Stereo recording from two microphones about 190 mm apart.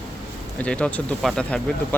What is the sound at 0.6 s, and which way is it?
Speech, 5° left (ahead or behind).